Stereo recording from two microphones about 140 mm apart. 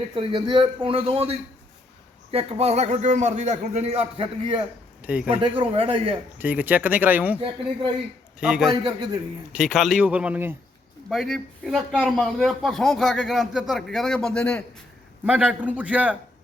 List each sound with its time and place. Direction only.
0.1 s a man's voice: 35° right (ahead or behind)
5.0 s speech: 10° right (ahead or behind)
5.4 s speech: 40° right (ahead or behind)
6.4 s speech: 10° right (ahead or behind)
8.4 s a man's voice: 5° right (ahead or behind)
8.8 s speech: 30° right (ahead or behind)
9.6 s speech: centre (ahead or behind)
11.1 s a man's voice: centre (ahead or behind)
15.2 s speech: 10° right (ahead or behind)